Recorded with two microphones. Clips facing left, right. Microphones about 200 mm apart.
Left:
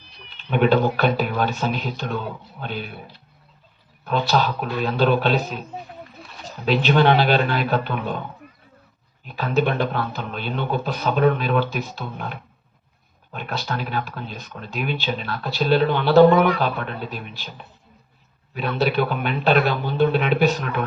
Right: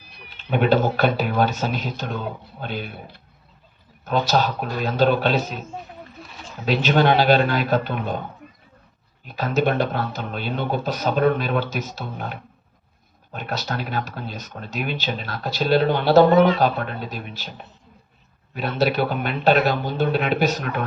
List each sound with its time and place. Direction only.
0.3 s a man's voice: 40° right (ahead or behind)
4.0 s a man's voice: 40° right (ahead or behind)
9.2 s a man's voice: 40° right (ahead or behind)
18.5 s a man's voice: 40° right (ahead or behind)